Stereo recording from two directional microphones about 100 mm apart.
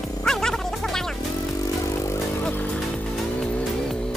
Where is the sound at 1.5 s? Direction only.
35° left (ahead or behind).